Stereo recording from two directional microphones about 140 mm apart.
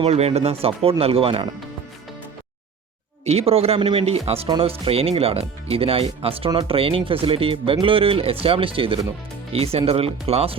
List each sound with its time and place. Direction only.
0.0 s speech: 50° right (ahead or behind)
3.2 s speech: 45° right (ahead or behind)